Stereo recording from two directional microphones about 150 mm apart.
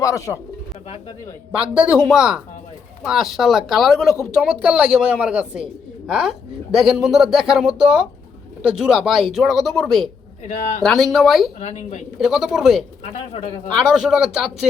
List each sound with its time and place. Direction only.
0.0 s speech: 20° left (ahead or behind)
1.5 s a woman's voice: 10° right (ahead or behind)
11.6 s speech: 50° left (ahead or behind)
12.2 s speech: centre (ahead or behind)